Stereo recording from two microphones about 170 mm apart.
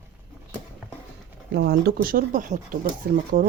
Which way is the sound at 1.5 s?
75° right (ahead or behind).